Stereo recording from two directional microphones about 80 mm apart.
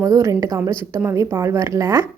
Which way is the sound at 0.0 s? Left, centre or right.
Right.